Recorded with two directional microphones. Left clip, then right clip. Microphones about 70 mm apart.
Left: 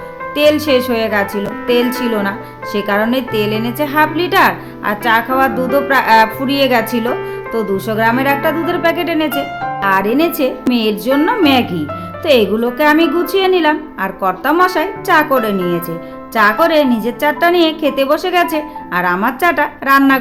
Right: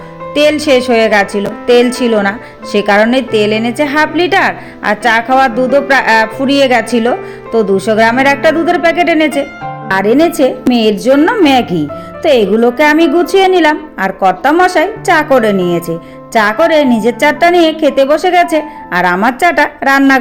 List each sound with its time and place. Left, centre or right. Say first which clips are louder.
0.3 s a woman's voice: right 3 dB; right
2.7 s a woman's voice: right 7 dB; right
9.9 s a woman's voice: right 6 dB; right
11.3 s speech: right 4 dB; right
16.9 s speech: right 5 dB; right
18.9 s a woman's voice: right 5 dB; right